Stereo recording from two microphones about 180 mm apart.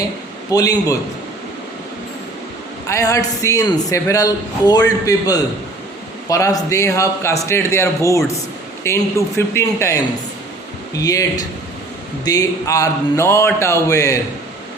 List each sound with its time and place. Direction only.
0.5 s speech: 20° left (ahead or behind)
2.8 s a man's voice: 15° left (ahead or behind)